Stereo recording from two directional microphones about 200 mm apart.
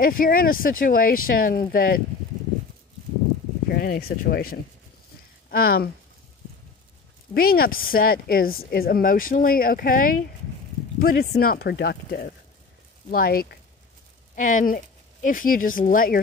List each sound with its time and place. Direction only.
0.0 s speech: 45° left (ahead or behind)
3.6 s speech: 50° left (ahead or behind)
5.5 s speech: 50° left (ahead or behind)
7.3 s speech: 50° left (ahead or behind)